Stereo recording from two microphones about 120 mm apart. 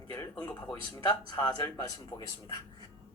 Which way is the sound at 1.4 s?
25° left (ahead or behind).